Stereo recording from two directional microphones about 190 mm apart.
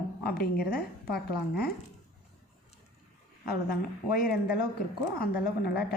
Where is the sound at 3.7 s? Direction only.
50° left (ahead or behind).